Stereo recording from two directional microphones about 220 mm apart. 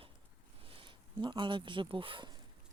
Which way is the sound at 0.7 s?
20° right (ahead or behind).